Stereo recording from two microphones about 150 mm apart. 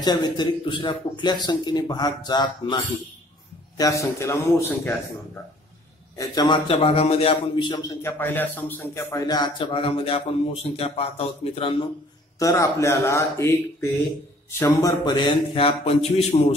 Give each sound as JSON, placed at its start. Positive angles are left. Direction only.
{"t": 0.0, "sound": "speech", "side_deg": 25}
{"t": 6.1, "sound": "a man's voice", "side_deg": 25}
{"t": 12.4, "sound": "speech", "side_deg": 20}
{"t": 15.5, "sound": "a sound", "side_deg": 40}